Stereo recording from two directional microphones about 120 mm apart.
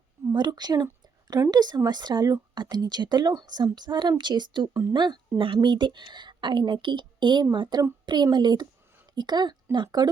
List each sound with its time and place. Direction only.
0.3 s speech: 35° right (ahead or behind)
4.7 s a woman's voice: 20° right (ahead or behind)
4.9 s speech: 40° right (ahead or behind)